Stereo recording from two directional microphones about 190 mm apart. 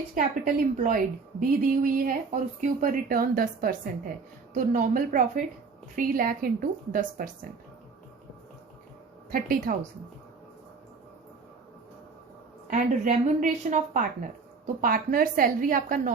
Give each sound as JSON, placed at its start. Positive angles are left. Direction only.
{"t": 0.1, "sound": "a woman's voice", "side_deg": -45}
{"t": 9.3, "sound": "a woman's voice", "side_deg": -50}
{"t": 12.7, "sound": "a woman's voice", "side_deg": -45}